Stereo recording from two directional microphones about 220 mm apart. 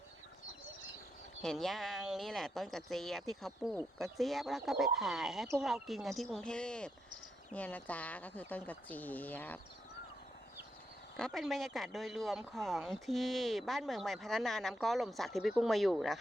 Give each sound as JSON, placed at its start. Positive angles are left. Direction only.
{"t": 1.4, "sound": "speech", "side_deg": 0}
{"t": 11.2, "sound": "speech", "side_deg": 0}